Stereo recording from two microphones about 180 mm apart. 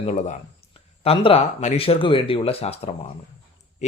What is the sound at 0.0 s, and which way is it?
Speech, 40° left (ahead or behind).